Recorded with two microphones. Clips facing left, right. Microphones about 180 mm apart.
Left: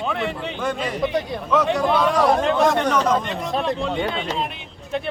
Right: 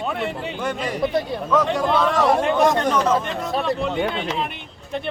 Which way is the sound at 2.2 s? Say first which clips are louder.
Right 1 dB; 5° right (ahead or behind).